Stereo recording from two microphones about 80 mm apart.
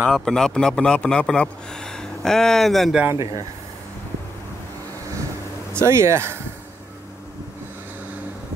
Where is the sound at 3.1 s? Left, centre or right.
Right.